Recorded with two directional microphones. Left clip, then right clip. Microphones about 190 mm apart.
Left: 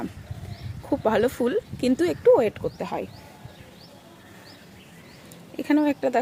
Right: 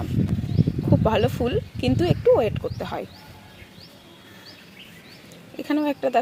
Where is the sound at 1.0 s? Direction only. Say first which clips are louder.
Left 2 dB; 20° left (ahead or behind).